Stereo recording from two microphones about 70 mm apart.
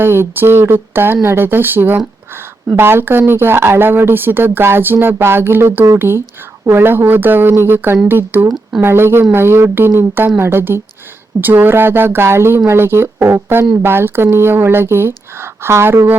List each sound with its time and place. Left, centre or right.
0.0 s speech: right